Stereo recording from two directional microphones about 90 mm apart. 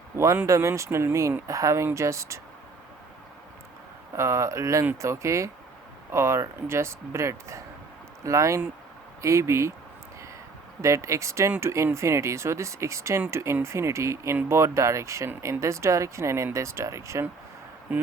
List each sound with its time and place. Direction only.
0.4 s speech: 35° right (ahead or behind)
4.2 s speech: 35° right (ahead or behind)
10.8 s speech: 35° right (ahead or behind)
17.9 s speech: 20° right (ahead or behind)